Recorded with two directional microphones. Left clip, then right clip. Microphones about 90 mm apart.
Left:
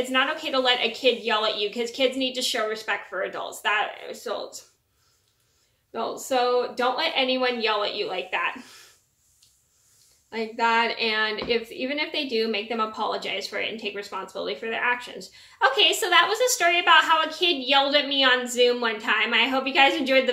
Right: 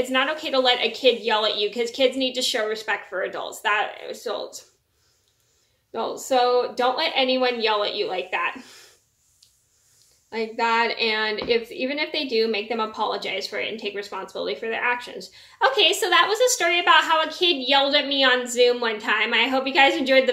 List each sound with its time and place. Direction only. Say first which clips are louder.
0.1 s a woman's voice: right 1 dB; 20° right (ahead or behind)
5.9 s a woman's voice: right 3 dB; 20° right (ahead or behind)
10.3 s a woman's voice: right 1 dB; 20° right (ahead or behind)